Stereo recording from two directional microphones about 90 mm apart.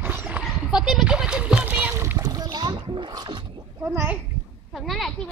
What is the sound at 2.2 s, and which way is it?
Splash, 45° right (ahead or behind).